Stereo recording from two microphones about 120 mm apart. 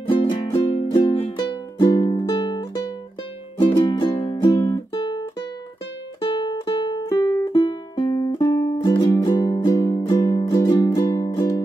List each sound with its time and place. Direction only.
0.1 s music: 45° left (ahead or behind)
0.8 s music: 30° left (ahead or behind)
6.2 s music: 40° left (ahead or behind)
7.9 s music: 45° left (ahead or behind)
8.2 s music: 30° left (ahead or behind)
8.8 s music: 40° left (ahead or behind)